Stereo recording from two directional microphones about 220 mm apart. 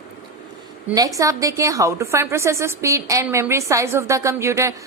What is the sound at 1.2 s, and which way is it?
A woman's voice, 15° right (ahead or behind).